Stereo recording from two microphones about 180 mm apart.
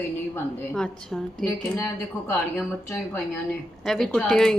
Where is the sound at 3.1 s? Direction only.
5° left (ahead or behind).